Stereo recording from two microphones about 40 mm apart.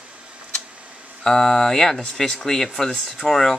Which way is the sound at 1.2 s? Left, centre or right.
Centre.